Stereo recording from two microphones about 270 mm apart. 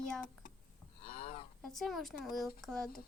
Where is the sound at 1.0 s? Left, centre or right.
Left.